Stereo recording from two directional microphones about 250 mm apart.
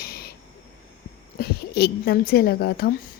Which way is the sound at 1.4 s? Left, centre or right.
Left.